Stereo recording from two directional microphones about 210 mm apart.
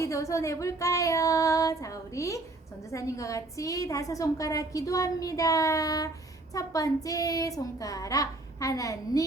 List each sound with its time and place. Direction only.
0.0 s a woman's voice: 15° left (ahead or behind)